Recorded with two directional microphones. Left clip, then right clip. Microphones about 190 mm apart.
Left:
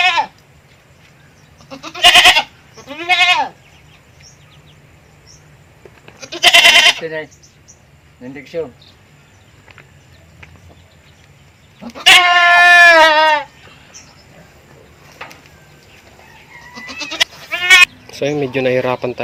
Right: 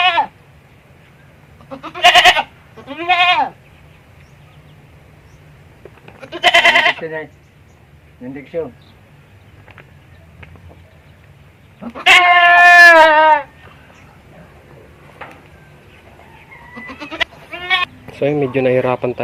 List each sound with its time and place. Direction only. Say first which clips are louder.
0.0 s sheep: even; 5° right (ahead or behind)
1.7 s goat: left 1 dB; 5° right (ahead or behind)
6.1 s goat: left 3 dB; centre (ahead or behind)
7.0 s speech: left 1 dB; 30° left (ahead or behind)
11.8 s goat: left 1 dB; 10° right (ahead or behind)
15.2 s a sound: left 1 dB; 30° left (ahead or behind)
16.7 s goat: left 4 dB; centre (ahead or behind)
18.1 s speech: right 1 dB; centre (ahead or behind)